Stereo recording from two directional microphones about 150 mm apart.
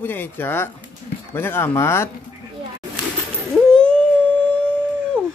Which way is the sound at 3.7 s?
5° left (ahead or behind).